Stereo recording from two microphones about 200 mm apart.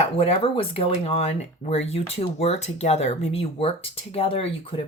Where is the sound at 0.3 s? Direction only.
30° left (ahead or behind).